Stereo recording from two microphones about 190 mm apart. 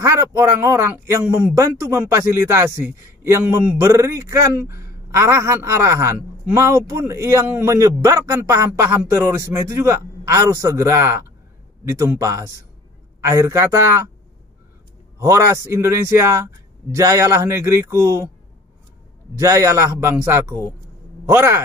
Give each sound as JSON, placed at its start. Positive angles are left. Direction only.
{"t": 0.0, "sound": "speech", "side_deg": -15}
{"t": 15.1, "sound": "speech", "side_deg": -15}
{"t": 19.3, "sound": "speech", "side_deg": -15}